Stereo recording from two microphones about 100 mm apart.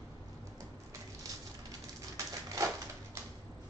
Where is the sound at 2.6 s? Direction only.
35° right (ahead or behind).